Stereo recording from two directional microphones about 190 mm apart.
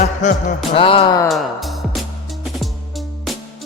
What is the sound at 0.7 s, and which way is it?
Speech, 30° left (ahead or behind).